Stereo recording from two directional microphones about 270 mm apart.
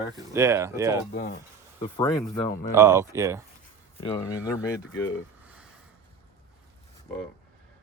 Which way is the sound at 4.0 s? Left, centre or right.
Centre.